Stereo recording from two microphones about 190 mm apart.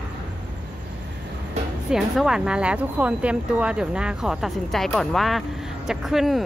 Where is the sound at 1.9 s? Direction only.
5° right (ahead or behind).